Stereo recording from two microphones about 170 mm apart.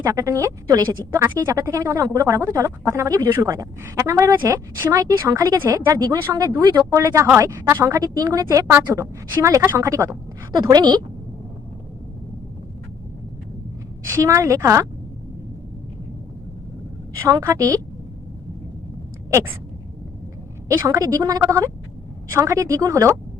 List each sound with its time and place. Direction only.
0.0 s speech: 20° right (ahead or behind)
14.1 s speech: 15° right (ahead or behind)
17.2 s speech: 20° right (ahead or behind)
19.3 s a sound: 15° right (ahead or behind)
20.7 s speech: 20° right (ahead or behind)